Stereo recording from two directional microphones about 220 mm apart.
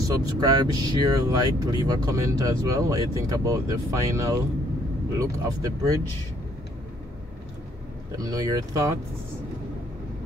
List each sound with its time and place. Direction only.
0.1 s speech: 15° right (ahead or behind)
8.2 s speech: 15° right (ahead or behind)